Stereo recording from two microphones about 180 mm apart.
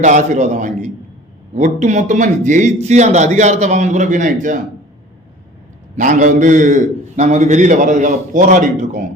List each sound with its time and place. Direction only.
0.0 s a man's voice: 40° right (ahead or behind)
6.0 s a man's voice: 45° right (ahead or behind)